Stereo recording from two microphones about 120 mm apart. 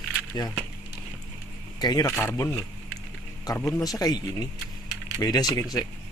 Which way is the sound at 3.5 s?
30° left (ahead or behind).